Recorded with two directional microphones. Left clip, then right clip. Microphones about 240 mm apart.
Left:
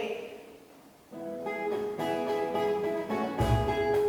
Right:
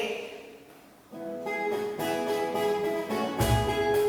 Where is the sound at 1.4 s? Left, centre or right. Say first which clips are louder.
Right 2 dB; centre.